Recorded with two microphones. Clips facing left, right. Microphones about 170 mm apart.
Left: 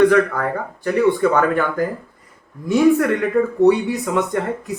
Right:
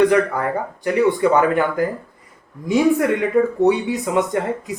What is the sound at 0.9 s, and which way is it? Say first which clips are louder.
Speech: even; 15° right (ahead or behind).